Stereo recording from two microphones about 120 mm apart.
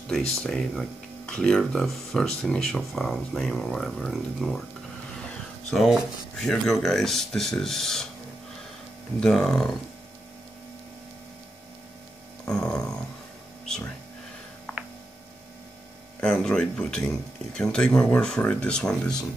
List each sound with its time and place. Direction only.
0.3 s speech: centre (ahead or behind)
5.7 s speech: centre (ahead or behind)
9.2 s speech: 5° left (ahead or behind)
12.4 s a sound: 5° left (ahead or behind)
16.2 s speech: 5° left (ahead or behind)